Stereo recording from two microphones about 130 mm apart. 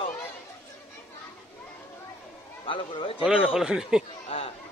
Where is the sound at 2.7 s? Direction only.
40° left (ahead or behind).